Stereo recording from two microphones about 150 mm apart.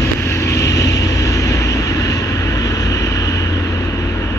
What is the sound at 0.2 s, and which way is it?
Vehicle, 20° left (ahead or behind).